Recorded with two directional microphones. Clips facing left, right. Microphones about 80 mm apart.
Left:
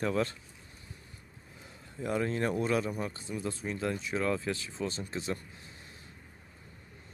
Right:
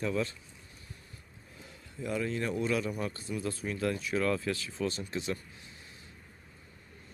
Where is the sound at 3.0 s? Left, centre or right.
Left.